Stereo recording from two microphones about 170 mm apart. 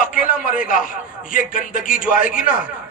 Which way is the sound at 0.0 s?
55° left (ahead or behind).